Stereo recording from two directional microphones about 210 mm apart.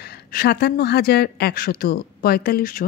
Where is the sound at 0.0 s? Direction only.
45° left (ahead or behind).